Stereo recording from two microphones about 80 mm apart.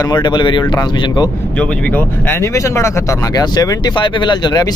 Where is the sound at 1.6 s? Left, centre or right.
Left.